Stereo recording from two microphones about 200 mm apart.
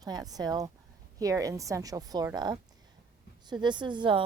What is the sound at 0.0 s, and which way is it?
A woman's voice, 20° right (ahead or behind).